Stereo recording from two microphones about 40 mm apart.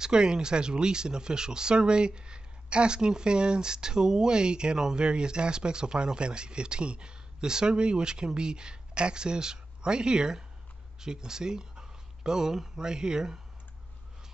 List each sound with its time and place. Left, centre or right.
0.0 s speech: centre